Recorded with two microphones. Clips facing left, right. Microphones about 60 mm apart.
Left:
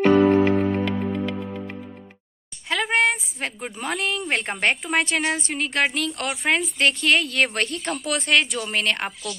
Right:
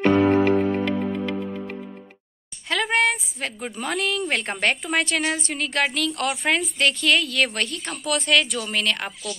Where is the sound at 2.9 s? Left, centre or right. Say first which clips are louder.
Left 1 dB; left.